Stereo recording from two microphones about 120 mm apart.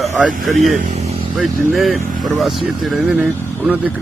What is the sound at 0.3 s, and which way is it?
Speech, centre (ahead or behind).